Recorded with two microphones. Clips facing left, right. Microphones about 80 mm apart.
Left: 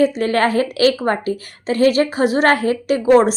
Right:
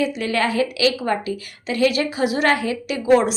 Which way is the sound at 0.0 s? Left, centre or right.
Left.